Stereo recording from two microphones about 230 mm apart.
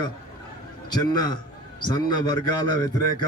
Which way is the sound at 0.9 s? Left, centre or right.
Centre.